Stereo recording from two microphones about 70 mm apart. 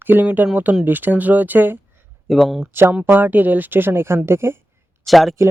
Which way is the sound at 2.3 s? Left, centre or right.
Centre.